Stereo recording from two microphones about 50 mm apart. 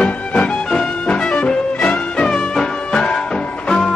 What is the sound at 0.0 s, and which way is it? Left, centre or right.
Music, left.